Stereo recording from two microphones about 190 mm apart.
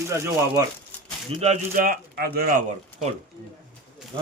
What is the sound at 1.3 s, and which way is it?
Speech, 35° right (ahead or behind).